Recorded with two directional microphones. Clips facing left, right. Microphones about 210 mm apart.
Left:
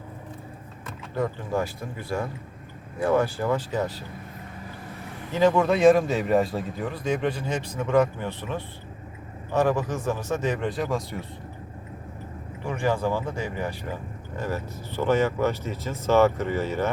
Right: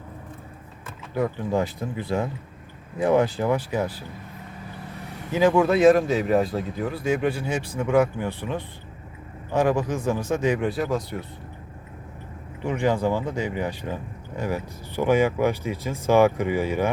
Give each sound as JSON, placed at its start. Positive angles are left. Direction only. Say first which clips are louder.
{"t": 1.1, "sound": "speech", "louder": "right 3 dB", "side_deg": -15}
{"t": 5.3, "sound": "speech", "louder": "right 2 dB", "side_deg": -10}
{"t": 12.6, "sound": "speech", "louder": "right 3 dB", "side_deg": -15}